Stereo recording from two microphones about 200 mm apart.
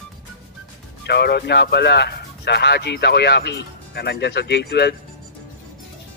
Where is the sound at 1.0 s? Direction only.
55° left (ahead or behind).